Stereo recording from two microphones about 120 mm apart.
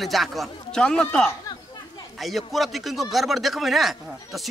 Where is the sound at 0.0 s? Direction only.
Centre (ahead or behind).